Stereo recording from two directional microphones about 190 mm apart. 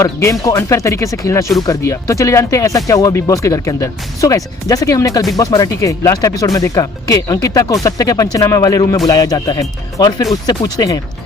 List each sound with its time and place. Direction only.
0.0 s speech: 15° left (ahead or behind)